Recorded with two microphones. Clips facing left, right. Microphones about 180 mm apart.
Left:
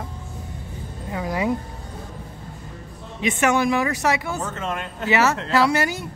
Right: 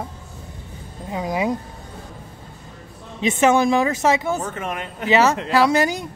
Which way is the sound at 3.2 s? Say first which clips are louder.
Right 4 dB; 20° right (ahead or behind).